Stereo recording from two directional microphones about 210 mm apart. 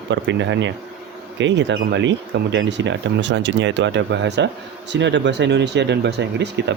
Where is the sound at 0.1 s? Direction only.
60° right (ahead or behind).